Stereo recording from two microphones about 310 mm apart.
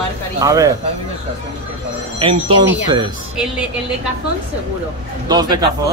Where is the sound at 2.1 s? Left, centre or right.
Centre.